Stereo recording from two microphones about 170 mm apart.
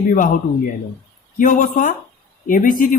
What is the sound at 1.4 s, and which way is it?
Speech, 50° left (ahead or behind).